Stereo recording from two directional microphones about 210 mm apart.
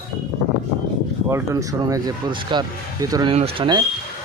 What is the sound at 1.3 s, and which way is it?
Speech, 15° right (ahead or behind).